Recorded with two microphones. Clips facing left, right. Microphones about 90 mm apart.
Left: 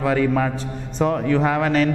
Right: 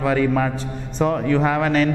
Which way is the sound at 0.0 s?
15° right (ahead or behind).